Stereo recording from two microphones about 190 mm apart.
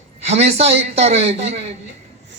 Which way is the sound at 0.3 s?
35° right (ahead or behind).